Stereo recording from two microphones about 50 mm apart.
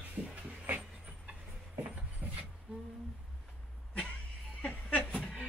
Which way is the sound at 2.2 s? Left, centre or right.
Right.